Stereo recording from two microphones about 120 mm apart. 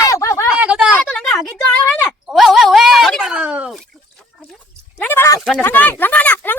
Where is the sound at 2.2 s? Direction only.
5° right (ahead or behind).